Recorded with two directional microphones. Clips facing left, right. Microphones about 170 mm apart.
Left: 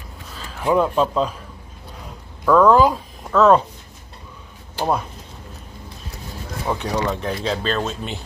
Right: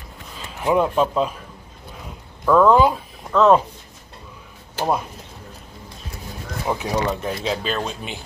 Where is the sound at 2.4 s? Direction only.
5° right (ahead or behind).